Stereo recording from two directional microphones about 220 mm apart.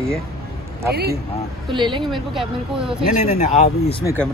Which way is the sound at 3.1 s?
35° left (ahead or behind).